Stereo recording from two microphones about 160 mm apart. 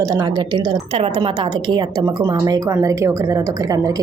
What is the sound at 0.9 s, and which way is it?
A woman's voice, 40° right (ahead or behind).